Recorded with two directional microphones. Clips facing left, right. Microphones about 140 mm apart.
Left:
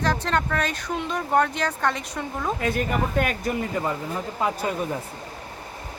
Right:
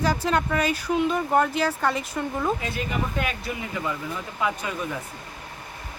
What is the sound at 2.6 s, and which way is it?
Speech, 50° left (ahead or behind).